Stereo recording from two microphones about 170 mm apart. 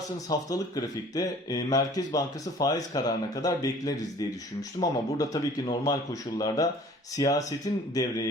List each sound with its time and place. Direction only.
0.3 s speech: 20° left (ahead or behind)
7.2 s speech: 20° left (ahead or behind)